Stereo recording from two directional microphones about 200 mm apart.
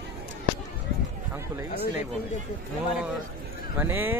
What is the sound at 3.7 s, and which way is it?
Speech, 10° right (ahead or behind).